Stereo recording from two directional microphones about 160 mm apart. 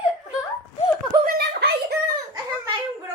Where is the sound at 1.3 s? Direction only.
90° right.